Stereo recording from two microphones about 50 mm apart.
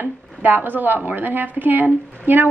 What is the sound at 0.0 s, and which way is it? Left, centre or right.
A woman's voice, right.